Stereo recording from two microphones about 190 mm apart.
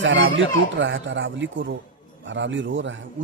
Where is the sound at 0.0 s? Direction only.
75° right (ahead or behind).